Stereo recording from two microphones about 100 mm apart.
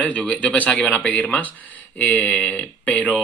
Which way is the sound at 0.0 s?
15° left (ahead or behind).